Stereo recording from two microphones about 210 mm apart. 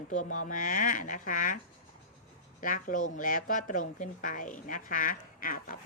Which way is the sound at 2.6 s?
40° left (ahead or behind).